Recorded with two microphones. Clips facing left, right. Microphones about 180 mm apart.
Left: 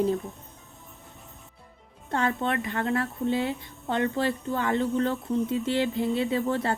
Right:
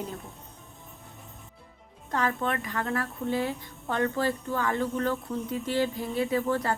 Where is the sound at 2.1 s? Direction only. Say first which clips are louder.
Left 2 dB; 25° left (ahead or behind).